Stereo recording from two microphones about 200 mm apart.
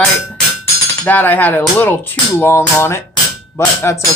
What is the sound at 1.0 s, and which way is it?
Music, 10° left (ahead or behind).